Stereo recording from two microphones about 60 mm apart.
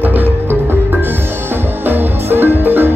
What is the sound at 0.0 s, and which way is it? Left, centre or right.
Music, right.